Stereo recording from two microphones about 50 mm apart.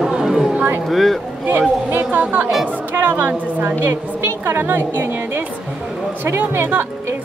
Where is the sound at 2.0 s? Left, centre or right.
Right.